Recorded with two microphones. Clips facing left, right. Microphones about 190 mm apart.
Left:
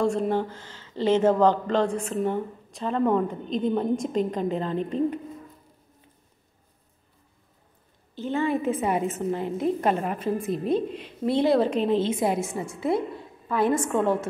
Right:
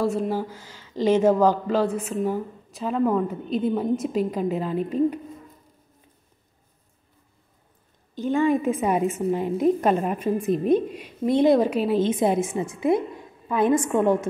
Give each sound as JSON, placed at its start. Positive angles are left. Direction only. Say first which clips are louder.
{"t": 0.0, "sound": "a woman's voice", "louder": "even", "side_deg": -5}
{"t": 8.1, "sound": "a woman's voice", "louder": "right 4 dB", "side_deg": -15}